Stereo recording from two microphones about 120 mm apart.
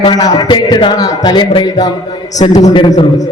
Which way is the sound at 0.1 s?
35° left (ahead or behind).